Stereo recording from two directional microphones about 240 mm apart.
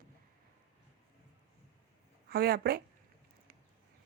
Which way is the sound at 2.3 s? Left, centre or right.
Right.